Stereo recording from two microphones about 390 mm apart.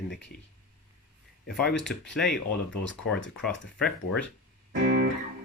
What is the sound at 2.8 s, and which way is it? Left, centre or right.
Speech, left.